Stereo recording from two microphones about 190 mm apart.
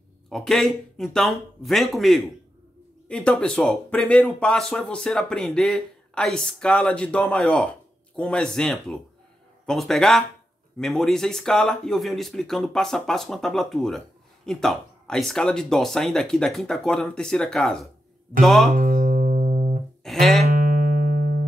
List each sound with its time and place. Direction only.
0.3 s speech: centre (ahead or behind)
18.8 s music: 50° right (ahead or behind)
20.0 s music: centre (ahead or behind)
20.4 s music: 50° right (ahead or behind)